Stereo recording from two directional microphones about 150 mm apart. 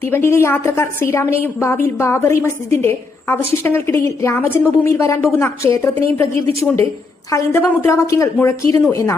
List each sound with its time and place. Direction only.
0.0 s a woman's voice: 15° left (ahead or behind)